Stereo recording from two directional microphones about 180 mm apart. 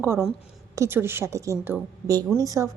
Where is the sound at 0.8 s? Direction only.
15° right (ahead or behind).